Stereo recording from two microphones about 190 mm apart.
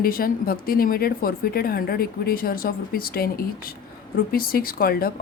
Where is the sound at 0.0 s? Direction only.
50° left (ahead or behind).